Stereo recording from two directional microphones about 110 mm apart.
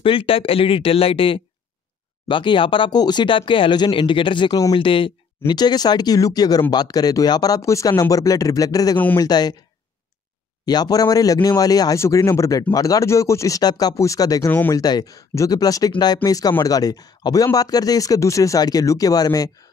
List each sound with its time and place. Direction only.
0.0 s speech: 55° left (ahead or behind)
5.5 s speech: 40° left (ahead or behind)
8.9 s speech: 15° left (ahead or behind)
9.2 s speech: 40° left (ahead or behind)
10.6 s speech: 40° left (ahead or behind)